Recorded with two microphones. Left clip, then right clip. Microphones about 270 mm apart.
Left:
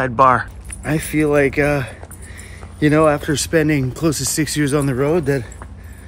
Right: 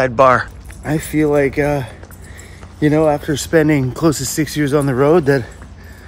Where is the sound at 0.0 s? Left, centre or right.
Centre.